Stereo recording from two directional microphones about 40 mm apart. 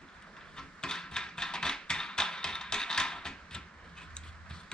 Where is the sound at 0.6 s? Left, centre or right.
Centre.